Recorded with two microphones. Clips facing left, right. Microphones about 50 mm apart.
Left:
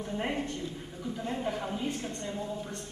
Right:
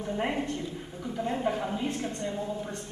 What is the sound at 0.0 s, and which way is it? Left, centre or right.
A man's voice, centre.